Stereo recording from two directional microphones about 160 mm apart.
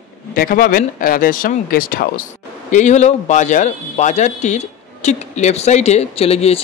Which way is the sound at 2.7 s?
45° left (ahead or behind).